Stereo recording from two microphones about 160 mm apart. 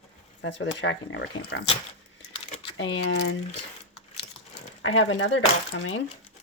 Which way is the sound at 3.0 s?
90° left.